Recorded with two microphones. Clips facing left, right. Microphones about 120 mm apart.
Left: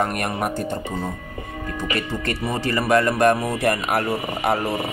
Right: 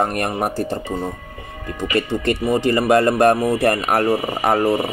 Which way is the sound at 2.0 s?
25° right (ahead or behind).